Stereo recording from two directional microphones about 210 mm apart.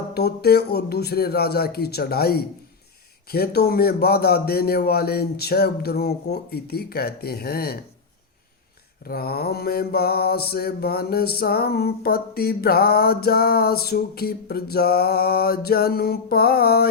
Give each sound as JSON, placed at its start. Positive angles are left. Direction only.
{"t": 0.1, "sound": "mantra", "side_deg": 50}
{"t": 9.0, "sound": "mantra", "side_deg": 45}